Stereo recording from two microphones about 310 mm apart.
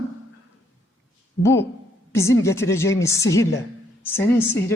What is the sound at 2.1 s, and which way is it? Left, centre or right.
A man's voice, centre.